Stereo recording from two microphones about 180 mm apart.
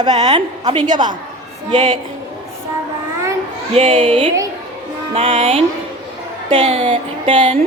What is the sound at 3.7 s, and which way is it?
A woman's voice, 35° right (ahead or behind).